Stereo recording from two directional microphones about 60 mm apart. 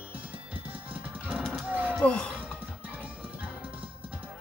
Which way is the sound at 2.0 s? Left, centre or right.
Left.